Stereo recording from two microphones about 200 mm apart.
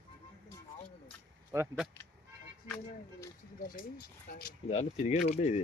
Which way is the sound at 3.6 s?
50° left (ahead or behind).